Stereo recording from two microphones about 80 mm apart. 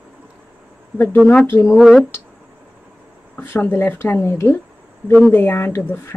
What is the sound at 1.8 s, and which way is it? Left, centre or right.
Speech, centre.